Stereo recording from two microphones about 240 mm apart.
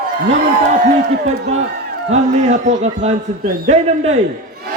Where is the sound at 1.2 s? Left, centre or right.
Right.